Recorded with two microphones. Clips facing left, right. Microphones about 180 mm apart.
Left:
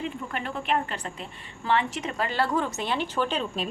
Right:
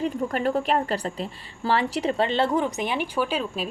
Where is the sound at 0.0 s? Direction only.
40° right (ahead or behind).